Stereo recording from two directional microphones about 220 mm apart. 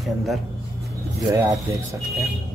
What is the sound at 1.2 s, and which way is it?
Speech, 15° right (ahead or behind).